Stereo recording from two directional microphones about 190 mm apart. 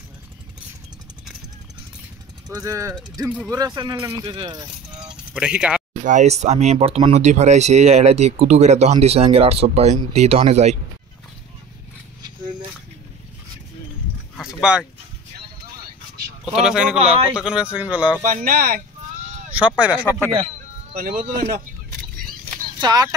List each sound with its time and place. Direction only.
2.5 s speech: 15° right (ahead or behind)
5.3 s speech: 5° right (ahead or behind)
6.0 s speech: 40° right (ahead or behind)
14.3 s a sound: 5° right (ahead or behind)
16.5 s speech: 5° right (ahead or behind)
18.2 s speech: 45° right (ahead or behind)
19.8 s speech: 10° right (ahead or behind)
21.1 s speech: 40° right (ahead or behind)
22.8 s speech: 20° right (ahead or behind)